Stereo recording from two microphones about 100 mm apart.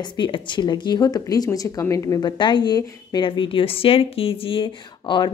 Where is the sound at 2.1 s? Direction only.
50° left (ahead or behind).